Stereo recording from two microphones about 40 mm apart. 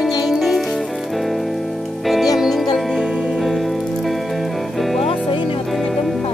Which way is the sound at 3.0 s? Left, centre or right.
Centre.